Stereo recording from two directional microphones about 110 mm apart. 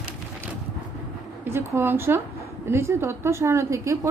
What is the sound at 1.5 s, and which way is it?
A woman's voice, 20° right (ahead or behind).